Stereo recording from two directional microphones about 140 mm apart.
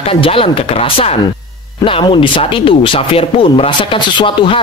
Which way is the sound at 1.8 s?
40° left (ahead or behind).